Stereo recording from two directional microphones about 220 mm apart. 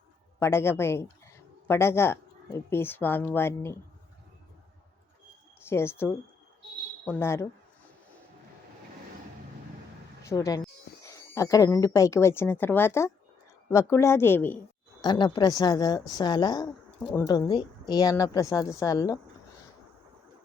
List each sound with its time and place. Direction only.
0.3 s speech: 10° left (ahead or behind)
5.6 s speech: 10° left (ahead or behind)
10.2 s speech: 15° left (ahead or behind)
15.0 s a woman's voice: 20° left (ahead or behind)
17.0 s speech: 5° left (ahead or behind)
17.2 s speech: 20° left (ahead or behind)